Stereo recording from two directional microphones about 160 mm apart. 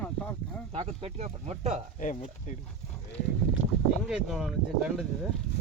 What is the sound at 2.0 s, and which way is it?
Speech, 55° left (ahead or behind).